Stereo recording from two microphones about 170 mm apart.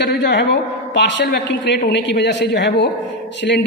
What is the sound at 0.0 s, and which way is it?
A man's voice, 90° left.